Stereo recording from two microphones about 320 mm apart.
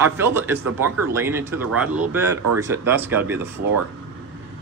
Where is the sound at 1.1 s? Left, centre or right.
Centre.